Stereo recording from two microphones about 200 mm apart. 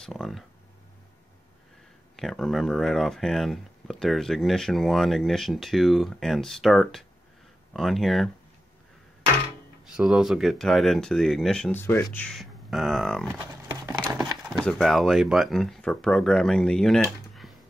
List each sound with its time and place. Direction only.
0.0 s speech: centre (ahead or behind)
2.1 s speech: centre (ahead or behind)
9.9 s speech: 5° right (ahead or behind)
13.4 s a sound: 20° right (ahead or behind)
14.5 s speech: centre (ahead or behind)